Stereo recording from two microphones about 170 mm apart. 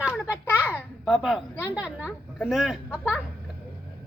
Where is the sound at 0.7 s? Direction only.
Centre (ahead or behind).